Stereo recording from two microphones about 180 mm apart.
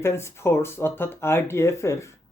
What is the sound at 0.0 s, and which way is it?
Speech, 15° left (ahead or behind).